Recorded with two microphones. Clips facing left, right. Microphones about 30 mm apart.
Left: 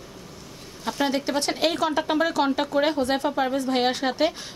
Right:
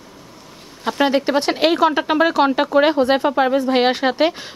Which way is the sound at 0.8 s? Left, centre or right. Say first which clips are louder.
Right 7 dB; right.